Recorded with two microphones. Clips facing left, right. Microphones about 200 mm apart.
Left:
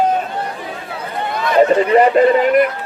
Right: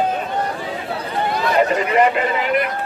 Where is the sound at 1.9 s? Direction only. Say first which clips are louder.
Left 3 dB; 40° left (ahead or behind).